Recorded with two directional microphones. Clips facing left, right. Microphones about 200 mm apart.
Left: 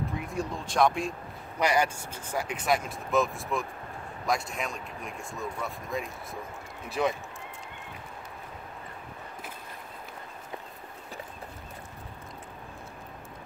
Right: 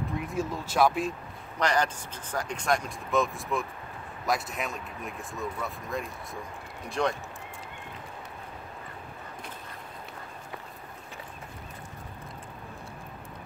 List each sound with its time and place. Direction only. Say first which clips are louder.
0.1 s speech: right 2 dB; centre (ahead or behind)
1.6 s speech: left 1 dB; 10° left (ahead or behind)